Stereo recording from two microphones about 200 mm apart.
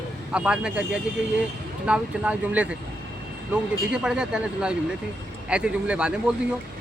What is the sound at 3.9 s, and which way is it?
Speech, 5° right (ahead or behind).